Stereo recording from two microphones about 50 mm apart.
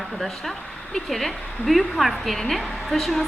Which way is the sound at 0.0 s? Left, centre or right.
Centre.